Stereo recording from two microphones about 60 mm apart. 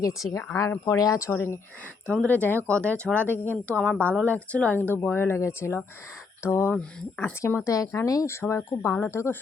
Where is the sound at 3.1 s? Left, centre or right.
Left.